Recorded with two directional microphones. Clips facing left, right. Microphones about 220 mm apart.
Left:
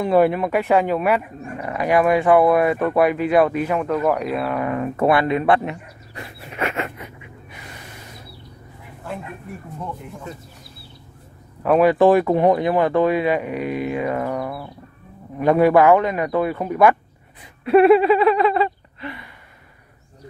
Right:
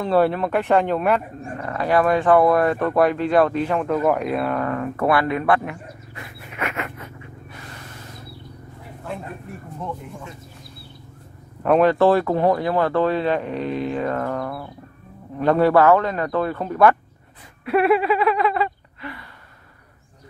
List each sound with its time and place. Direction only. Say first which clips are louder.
0.0 s speech: left 2 dB; 15° left (ahead or behind); by 6.9 s 30° left (ahead or behind)
11.6 s speech: left 1 dB; 5° left (ahead or behind)
11.9 s speech: left 2 dB; 15° left (ahead or behind)
17.6 s a sound: left 6 dB; 25° left (ahead or behind)